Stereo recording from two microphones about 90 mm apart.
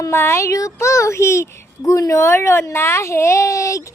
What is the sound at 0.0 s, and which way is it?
Speech, 30° left (ahead or behind).